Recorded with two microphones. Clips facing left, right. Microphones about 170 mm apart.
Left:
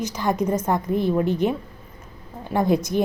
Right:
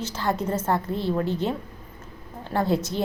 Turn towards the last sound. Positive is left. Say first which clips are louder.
# left 4 dB
turn(degrees=15)  # may be behind; listen again after turning